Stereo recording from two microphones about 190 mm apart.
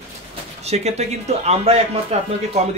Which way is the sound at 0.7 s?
35° right (ahead or behind).